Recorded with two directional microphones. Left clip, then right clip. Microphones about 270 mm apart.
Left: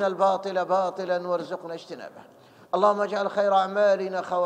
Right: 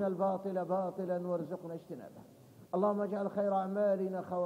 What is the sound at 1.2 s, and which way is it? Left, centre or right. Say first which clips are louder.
Speech: left 9 dB; left.